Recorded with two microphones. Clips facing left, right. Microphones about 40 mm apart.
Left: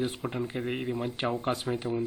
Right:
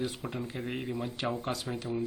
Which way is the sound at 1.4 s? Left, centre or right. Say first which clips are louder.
Left 5 dB; left.